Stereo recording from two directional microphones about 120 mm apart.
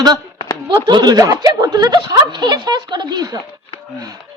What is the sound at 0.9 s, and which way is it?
Speech, 40° right (ahead or behind).